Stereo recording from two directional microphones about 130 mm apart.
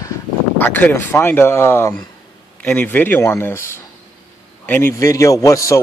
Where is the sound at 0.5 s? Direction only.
15° left (ahead or behind).